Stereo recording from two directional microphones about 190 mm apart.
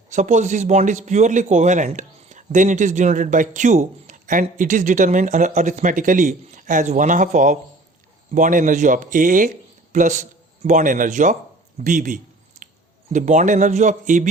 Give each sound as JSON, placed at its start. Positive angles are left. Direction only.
{"t": 0.1, "sound": "a man's voice", "side_deg": -40}
{"t": 11.8, "sound": "a sound", "side_deg": -45}
{"t": 13.1, "sound": "a man's voice", "side_deg": -40}